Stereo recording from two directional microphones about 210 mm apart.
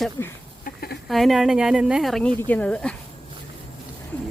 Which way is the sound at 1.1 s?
Centre (ahead or behind).